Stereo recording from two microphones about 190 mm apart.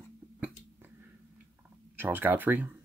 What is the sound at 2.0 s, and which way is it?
Speech, 10° right (ahead or behind).